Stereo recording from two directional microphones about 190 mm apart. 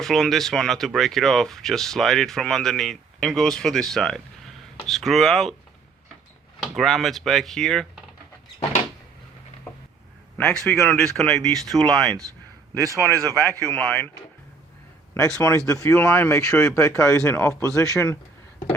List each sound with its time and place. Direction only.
0.0 s speech: centre (ahead or behind)
6.6 s speech: centre (ahead or behind)
10.3 s speech: 5° left (ahead or behind)
12.7 s speech: 15° right (ahead or behind)
13.7 s speech: 10° left (ahead or behind)
15.4 s speech: 15° left (ahead or behind)